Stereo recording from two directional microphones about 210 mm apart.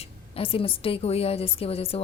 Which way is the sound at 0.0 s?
25° left (ahead or behind).